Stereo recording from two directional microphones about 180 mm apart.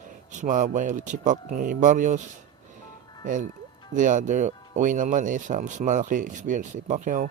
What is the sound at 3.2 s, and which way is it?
Speech, 45° right (ahead or behind).